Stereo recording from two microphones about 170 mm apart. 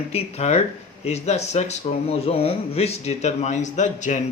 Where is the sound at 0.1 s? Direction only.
40° left (ahead or behind).